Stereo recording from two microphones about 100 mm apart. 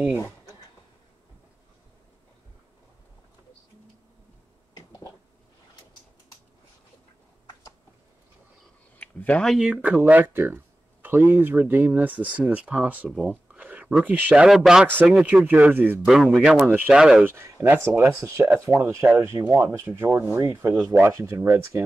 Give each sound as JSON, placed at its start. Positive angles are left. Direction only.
{"t": 8.9, "sound": "a sound", "side_deg": 15}
{"t": 9.5, "sound": "speech", "side_deg": -5}
{"t": 13.5, "sound": "a sound", "side_deg": -15}
{"t": 14.0, "sound": "speech", "side_deg": -15}
{"t": 15.4, "sound": "speech", "side_deg": -20}
{"t": 16.1, "sound": "speech", "side_deg": 0}
{"t": 16.6, "sound": "speech", "side_deg": -20}
{"t": 16.9, "sound": "speech", "side_deg": -5}
{"t": 17.2, "sound": "speech", "side_deg": -25}
{"t": 19.5, "sound": "speech", "side_deg": -20}